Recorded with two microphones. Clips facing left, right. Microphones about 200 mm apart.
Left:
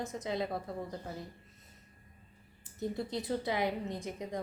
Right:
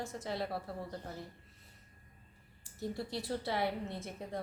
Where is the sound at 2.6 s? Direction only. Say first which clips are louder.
Left 3 dB; 20° left (ahead or behind).